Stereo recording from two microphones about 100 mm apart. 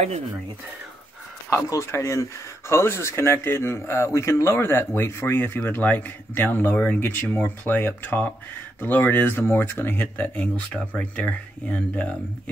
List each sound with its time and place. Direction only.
1.5 s speech: 30° left (ahead or behind); by 12.1 s 15° left (ahead or behind)